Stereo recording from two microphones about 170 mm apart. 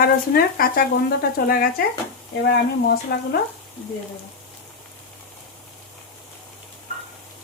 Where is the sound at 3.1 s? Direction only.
75° left (ahead or behind).